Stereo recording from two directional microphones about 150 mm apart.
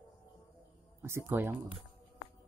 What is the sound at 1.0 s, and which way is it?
Speech, 15° right (ahead or behind).